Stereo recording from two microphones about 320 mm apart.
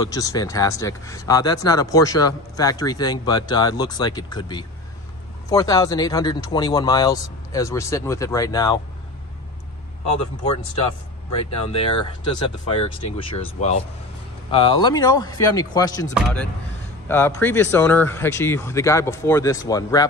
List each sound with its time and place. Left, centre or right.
0.0 s speech: centre
11.7 s speech: centre